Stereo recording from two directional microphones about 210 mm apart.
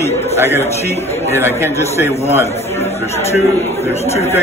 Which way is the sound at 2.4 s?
30° left (ahead or behind).